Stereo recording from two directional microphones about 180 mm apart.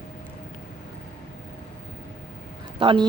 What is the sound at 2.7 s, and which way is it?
Speech, 30° right (ahead or behind).